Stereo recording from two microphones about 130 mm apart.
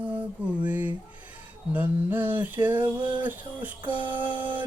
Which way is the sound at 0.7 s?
10° right (ahead or behind).